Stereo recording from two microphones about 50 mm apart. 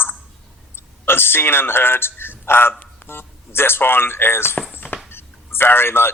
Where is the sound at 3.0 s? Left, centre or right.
Left.